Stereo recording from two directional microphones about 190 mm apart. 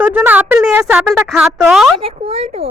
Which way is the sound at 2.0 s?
30° right (ahead or behind).